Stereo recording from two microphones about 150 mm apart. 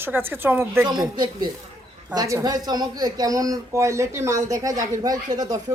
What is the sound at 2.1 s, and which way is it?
Speech, 25° right (ahead or behind).